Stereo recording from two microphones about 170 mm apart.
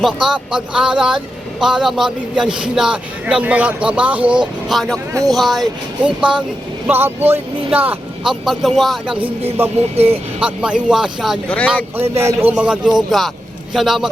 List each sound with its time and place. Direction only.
0.0 s a man's voice: 5° right (ahead or behind)
9.7 s speech: 35° right (ahead or behind)
10.1 s a man's voice: 5° right (ahead or behind)
11.9 s a man's voice: 15° right (ahead or behind)